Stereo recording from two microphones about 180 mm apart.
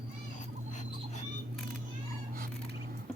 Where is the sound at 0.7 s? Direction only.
40° left (ahead or behind).